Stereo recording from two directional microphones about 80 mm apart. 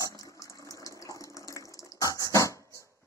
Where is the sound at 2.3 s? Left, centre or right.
Left.